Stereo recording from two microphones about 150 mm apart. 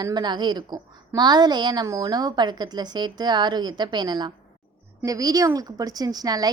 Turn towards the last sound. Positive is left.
turn(degrees=-25)  # may be behind; listen again after turning